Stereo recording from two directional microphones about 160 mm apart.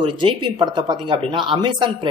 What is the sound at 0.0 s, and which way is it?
Speech, 30° right (ahead or behind).